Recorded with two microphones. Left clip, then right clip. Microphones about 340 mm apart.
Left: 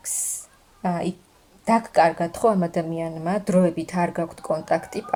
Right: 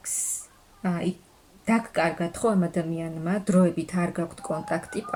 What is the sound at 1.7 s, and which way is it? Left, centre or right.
Speech, centre.